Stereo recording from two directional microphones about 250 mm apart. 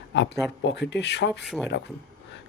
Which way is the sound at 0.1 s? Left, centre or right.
Left.